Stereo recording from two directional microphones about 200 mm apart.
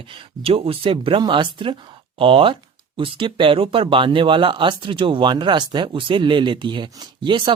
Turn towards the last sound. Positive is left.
turn(degrees=-25)  # may be behind; listen again after turning